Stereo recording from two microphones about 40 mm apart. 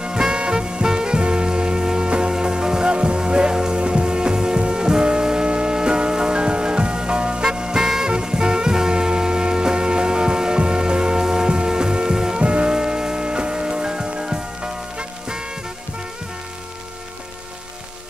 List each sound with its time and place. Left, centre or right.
0.0 s swing music: centre
8.1 s music: centre